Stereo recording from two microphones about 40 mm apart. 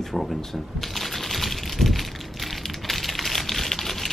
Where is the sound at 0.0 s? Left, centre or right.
Centre.